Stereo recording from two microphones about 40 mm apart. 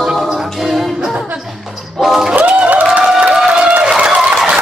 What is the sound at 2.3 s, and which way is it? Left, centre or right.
Music, right.